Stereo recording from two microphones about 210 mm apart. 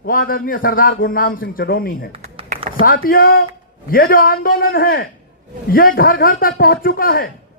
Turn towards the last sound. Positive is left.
turn(degrees=45)  # may be behind; listen again after turning